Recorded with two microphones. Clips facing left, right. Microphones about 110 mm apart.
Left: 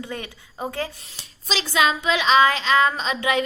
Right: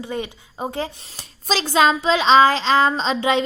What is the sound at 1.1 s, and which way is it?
A woman's voice, 40° right (ahead or behind).